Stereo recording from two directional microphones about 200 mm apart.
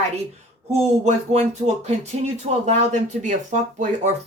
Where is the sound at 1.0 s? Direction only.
35° right (ahead or behind).